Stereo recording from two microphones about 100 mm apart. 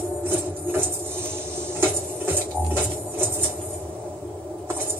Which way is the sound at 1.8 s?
20° right (ahead or behind).